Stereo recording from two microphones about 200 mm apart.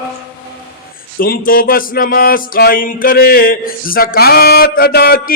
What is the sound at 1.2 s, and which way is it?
Music, 45° left (ahead or behind).